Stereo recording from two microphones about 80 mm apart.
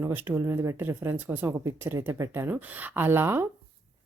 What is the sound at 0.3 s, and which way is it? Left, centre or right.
Speech, right.